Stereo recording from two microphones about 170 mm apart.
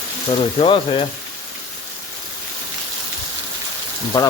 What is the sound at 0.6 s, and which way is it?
Speech, 35° left (ahead or behind).